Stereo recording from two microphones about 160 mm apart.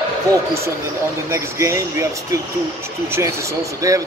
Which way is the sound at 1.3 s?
15° right (ahead or behind).